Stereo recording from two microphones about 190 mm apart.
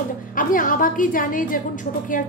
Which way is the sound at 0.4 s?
45° left (ahead or behind).